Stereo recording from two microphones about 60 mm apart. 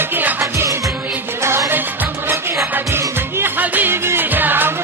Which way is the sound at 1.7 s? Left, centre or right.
Right.